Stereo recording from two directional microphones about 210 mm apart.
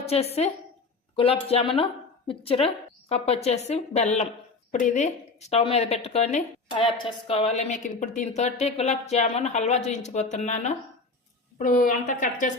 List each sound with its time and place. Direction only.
0.0 s a woman's voice: 30° left (ahead or behind)